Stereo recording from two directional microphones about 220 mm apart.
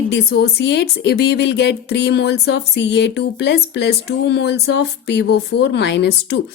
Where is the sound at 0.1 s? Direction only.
50° left (ahead or behind).